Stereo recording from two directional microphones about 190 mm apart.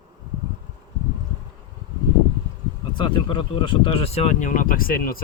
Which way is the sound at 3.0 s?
25° left (ahead or behind).